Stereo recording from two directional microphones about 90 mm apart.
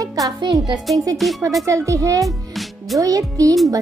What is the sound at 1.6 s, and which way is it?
Speech, 35° right (ahead or behind).